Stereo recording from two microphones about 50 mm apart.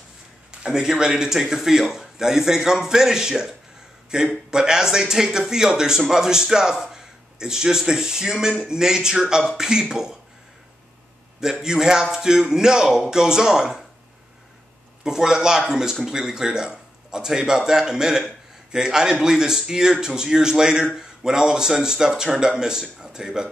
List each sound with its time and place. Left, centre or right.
0.7 s a man's voice: centre
11.6 s a man's voice: centre
15.0 s a man's voice: centre